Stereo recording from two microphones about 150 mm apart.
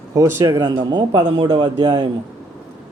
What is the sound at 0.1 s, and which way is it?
Speech, 20° right (ahead or behind).